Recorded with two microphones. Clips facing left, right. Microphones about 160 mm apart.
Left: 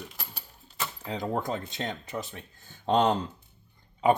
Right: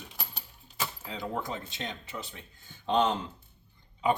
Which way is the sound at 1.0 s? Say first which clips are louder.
Left 6 dB; 40° left (ahead or behind).